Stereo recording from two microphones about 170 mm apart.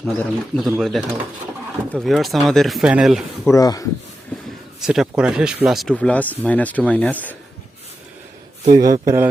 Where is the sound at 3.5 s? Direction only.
20° left (ahead or behind).